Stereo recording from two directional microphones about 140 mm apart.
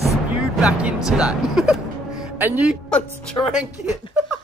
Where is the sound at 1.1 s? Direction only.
5° right (ahead or behind).